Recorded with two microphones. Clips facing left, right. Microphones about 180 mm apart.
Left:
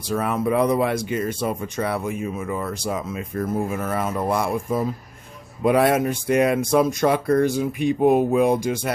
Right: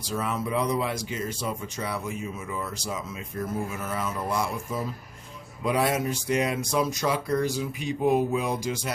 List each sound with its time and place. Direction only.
0.1 s speech: 55° left (ahead or behind)